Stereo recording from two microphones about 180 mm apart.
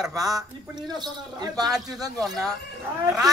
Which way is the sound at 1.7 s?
Centre (ahead or behind).